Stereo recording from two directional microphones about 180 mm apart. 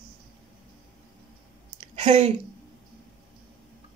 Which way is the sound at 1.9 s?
35° right (ahead or behind).